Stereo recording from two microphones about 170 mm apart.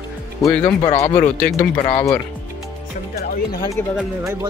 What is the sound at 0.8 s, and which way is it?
Speech, 40° left (ahead or behind).